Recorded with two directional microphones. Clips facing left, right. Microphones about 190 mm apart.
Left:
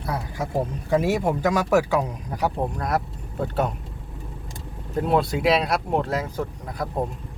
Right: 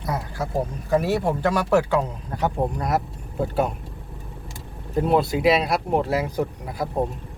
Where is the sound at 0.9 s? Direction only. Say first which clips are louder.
Even; 15° left (ahead or behind).